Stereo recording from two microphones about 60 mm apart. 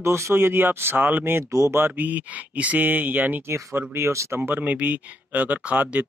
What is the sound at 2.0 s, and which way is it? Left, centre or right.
Speech, right.